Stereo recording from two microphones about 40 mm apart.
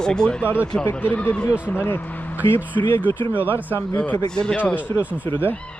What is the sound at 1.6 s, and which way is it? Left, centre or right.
Speech, left.